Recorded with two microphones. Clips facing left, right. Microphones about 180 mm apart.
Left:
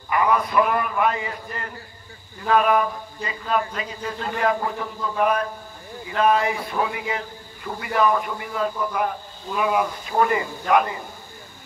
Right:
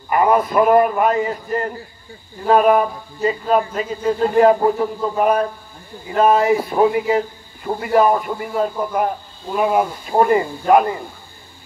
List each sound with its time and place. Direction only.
0.1 s a man's voice: 45° right (ahead or behind)